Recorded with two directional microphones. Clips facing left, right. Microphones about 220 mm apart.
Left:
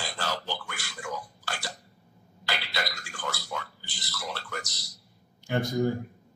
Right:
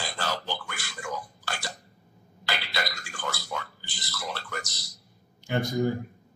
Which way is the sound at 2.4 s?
50° right (ahead or behind).